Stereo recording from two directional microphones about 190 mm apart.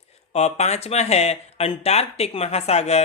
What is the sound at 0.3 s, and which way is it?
Speech, 35° left (ahead or behind).